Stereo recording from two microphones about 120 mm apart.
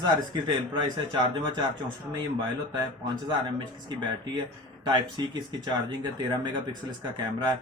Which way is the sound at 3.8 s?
40° right (ahead or behind).